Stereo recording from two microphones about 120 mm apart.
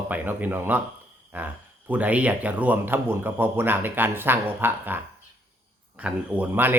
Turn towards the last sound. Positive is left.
turn(degrees=-15)  # may be behind; listen again after turning